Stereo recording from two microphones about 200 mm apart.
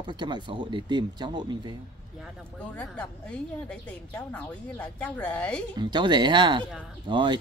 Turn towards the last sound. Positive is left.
turn(degrees=-25)  # may be behind; listen again after turning